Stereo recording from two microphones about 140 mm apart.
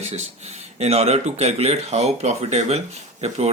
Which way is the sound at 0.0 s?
50° right (ahead or behind).